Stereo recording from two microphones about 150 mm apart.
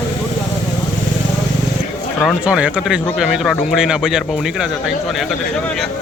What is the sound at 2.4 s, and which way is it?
A man's voice, 5° right (ahead or behind).